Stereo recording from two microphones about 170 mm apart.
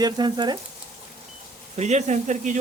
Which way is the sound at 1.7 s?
40° right (ahead or behind).